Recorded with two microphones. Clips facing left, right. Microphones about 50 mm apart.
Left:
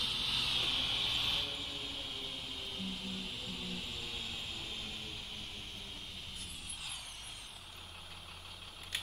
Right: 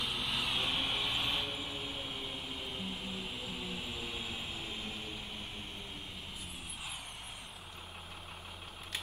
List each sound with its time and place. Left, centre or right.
0.0 s vehicle: centre